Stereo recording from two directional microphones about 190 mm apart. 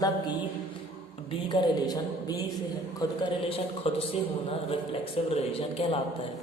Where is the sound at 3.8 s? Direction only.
30° left (ahead or behind).